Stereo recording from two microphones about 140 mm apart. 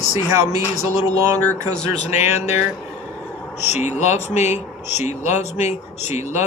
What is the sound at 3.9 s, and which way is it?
Speech, 55° left (ahead or behind).